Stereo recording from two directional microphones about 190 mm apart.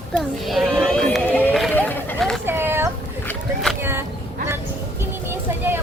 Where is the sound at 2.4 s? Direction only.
10° right (ahead or behind).